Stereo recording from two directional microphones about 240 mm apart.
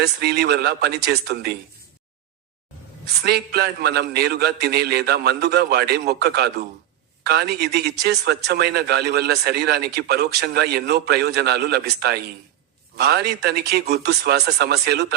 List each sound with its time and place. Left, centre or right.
0.0 s a man's voice: right
3.2 s a man's voice: right